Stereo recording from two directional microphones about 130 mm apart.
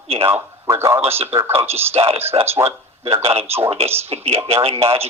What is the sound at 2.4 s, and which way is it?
Speech, 20° right (ahead or behind).